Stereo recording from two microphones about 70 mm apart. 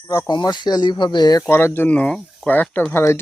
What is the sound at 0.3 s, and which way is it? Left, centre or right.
Speech, left.